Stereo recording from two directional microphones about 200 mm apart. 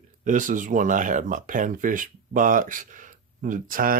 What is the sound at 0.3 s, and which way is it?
Speech, 40° right (ahead or behind).